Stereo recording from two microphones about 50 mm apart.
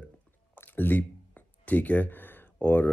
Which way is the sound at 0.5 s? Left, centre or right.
Left.